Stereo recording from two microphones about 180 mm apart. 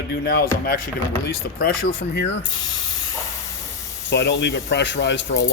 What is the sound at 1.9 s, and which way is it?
Speech, 80° left.